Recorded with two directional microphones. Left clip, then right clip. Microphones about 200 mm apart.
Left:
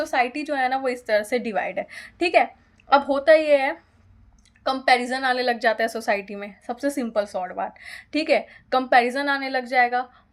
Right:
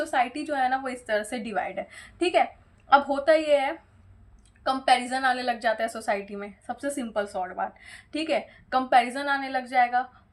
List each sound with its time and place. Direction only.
0.0 s a woman's voice: 40° left (ahead or behind)